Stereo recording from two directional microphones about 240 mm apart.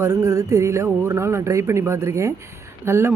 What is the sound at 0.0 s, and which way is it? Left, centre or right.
A woman's voice, centre.